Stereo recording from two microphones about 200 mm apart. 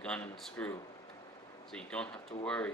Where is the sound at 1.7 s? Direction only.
5° left (ahead or behind).